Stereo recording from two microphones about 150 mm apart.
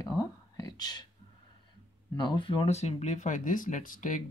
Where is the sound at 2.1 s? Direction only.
30° left (ahead or behind).